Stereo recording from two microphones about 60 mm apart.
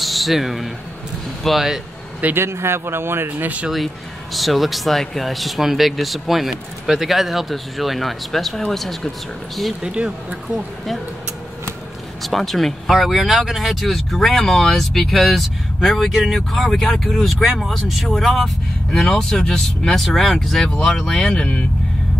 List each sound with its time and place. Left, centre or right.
0.0 s speech: centre
2.3 s speech: right
3.7 s speech: centre
9.8 s speech: centre
12.2 s speech: centre